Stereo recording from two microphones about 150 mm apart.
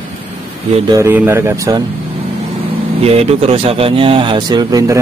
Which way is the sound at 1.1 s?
15° right (ahead or behind).